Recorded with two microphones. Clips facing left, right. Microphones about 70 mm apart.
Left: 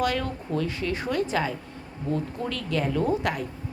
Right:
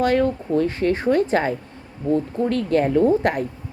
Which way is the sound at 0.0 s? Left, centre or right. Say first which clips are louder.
Right 8 dB; right.